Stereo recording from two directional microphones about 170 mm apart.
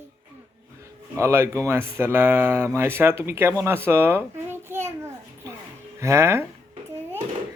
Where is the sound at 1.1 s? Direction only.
15° right (ahead or behind).